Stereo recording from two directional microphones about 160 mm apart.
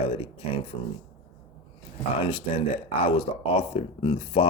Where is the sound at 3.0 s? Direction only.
35° left (ahead or behind).